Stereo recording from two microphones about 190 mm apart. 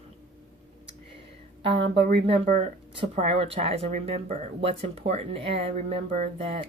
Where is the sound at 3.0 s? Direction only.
30° right (ahead or behind).